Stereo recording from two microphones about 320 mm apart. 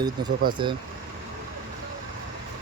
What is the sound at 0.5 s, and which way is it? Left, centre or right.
Speech, centre.